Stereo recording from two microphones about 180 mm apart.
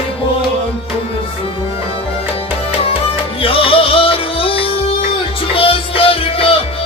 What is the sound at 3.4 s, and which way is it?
Music, 30° left (ahead or behind).